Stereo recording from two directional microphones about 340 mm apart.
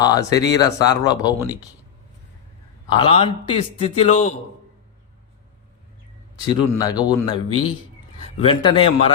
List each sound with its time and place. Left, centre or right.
0.0 s speech: centre
2.9 s speech: centre
6.5 s speech: centre